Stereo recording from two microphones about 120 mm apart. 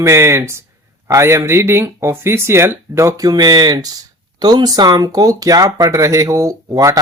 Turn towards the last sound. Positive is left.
turn(degrees=-30)  # may be behind; listen again after turning